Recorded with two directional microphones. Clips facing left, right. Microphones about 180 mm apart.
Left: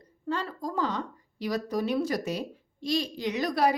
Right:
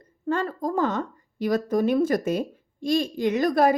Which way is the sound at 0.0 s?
50° right (ahead or behind).